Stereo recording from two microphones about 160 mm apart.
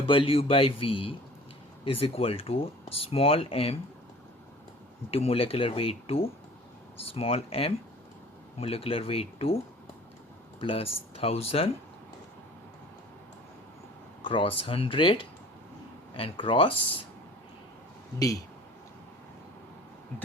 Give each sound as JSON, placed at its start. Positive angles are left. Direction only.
{"t": 0.1, "sound": "speech", "side_deg": 35}
{"t": 5.1, "sound": "speech", "side_deg": 40}
{"t": 10.6, "sound": "speech", "side_deg": 35}
{"t": 14.3, "sound": "speech", "side_deg": 35}